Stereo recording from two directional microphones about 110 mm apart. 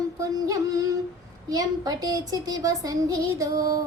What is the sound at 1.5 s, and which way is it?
A woman's voice, 35° right (ahead or behind).